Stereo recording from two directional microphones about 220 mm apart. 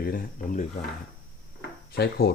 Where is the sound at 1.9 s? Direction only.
45° left (ahead or behind).